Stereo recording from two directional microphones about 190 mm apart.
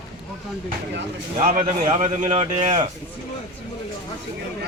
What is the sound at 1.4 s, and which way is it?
Speech, 40° right (ahead or behind).